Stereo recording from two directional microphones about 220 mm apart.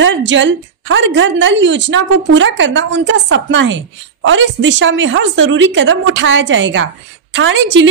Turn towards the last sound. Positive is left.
turn(degrees=-55)  # may be behind; listen again after turning